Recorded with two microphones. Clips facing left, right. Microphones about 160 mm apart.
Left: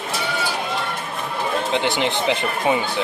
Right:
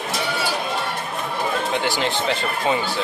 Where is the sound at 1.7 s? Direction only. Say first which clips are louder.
Left 1 dB; 20° left (ahead or behind).